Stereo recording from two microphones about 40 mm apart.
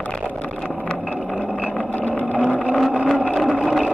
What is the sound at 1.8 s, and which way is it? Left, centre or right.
Vehicle, left.